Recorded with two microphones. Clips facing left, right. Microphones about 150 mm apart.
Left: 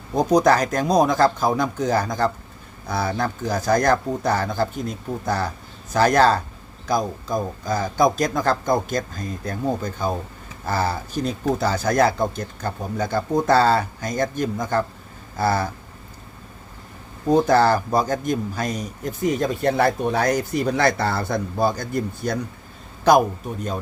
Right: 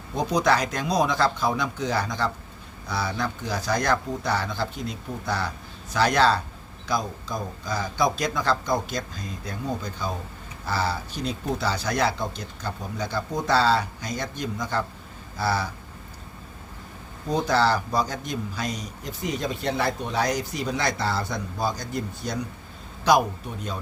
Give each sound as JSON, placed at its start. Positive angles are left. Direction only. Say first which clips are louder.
{"t": 0.1, "sound": "a man's voice", "louder": "left 6 dB", "side_deg": 45}
{"t": 17.2, "sound": "a man's voice", "louder": "left 6 dB", "side_deg": 50}
{"t": 23.4, "sound": "a man's voice", "louder": "left 5 dB", "side_deg": 45}